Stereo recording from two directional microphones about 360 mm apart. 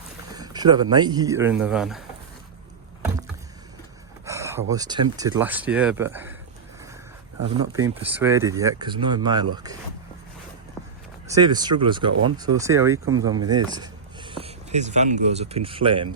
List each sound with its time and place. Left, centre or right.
0.3 s speech: centre
4.3 s a sound: centre
4.7 s speech: centre
7.5 s speech: centre
11.3 s speech: centre